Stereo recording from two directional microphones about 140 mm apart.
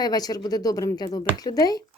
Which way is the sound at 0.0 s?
30° left (ahead or behind).